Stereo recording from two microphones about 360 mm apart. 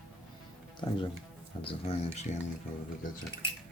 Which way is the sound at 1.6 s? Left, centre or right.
Centre.